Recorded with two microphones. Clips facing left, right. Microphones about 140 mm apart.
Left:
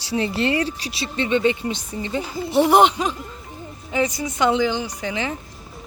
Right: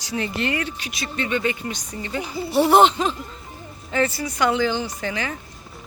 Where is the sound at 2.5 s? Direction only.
15° left (ahead or behind).